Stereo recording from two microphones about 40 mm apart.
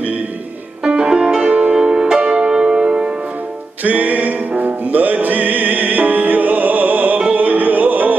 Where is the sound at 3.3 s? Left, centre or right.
Right.